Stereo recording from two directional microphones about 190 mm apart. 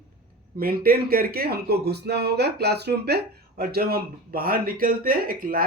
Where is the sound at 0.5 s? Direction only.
50° right (ahead or behind).